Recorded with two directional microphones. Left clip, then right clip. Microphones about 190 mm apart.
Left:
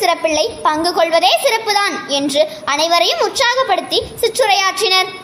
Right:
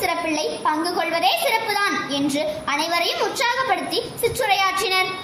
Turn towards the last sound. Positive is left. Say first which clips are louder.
# left 6 dB
turn(degrees=50)  # may be behind; listen again after turning